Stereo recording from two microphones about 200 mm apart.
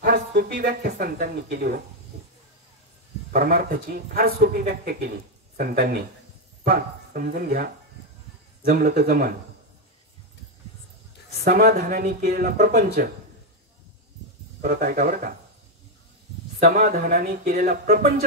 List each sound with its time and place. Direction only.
0.0 s speech: 50° right (ahead or behind)
3.3 s speech: 45° right (ahead or behind)
11.4 s speech: 50° right (ahead or behind)
14.6 s speech: 45° right (ahead or behind)
16.5 s speech: 45° right (ahead or behind)